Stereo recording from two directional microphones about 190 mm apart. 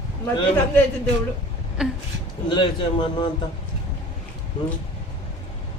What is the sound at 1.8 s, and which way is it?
Speech, 5° right (ahead or behind).